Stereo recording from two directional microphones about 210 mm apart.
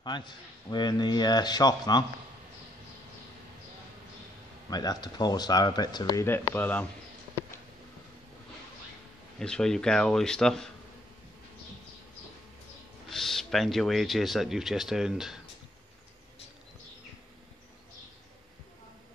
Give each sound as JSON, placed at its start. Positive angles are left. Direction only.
{"t": 0.0, "sound": "a man's voice", "side_deg": 20}
{"t": 4.6, "sound": "a man's voice", "side_deg": 20}
{"t": 9.4, "sound": "speech", "side_deg": 5}
{"t": 13.1, "sound": "speech", "side_deg": 0}